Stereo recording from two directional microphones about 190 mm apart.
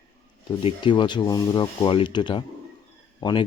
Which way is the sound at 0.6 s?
25° left (ahead or behind).